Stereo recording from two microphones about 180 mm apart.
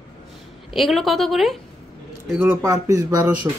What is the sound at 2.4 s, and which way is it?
Speech, 15° right (ahead or behind).